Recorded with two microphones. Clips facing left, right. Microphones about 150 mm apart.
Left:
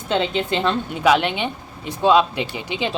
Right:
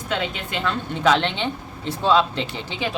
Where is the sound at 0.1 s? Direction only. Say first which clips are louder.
Left 6 dB; 25° left (ahead or behind).